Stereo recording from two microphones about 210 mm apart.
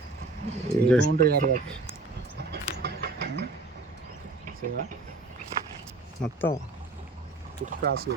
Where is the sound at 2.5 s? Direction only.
50° right (ahead or behind).